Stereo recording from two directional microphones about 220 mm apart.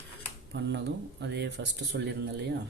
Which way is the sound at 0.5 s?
50° right (ahead or behind).